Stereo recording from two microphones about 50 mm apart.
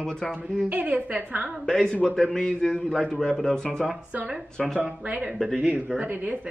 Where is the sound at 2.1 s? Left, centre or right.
Centre.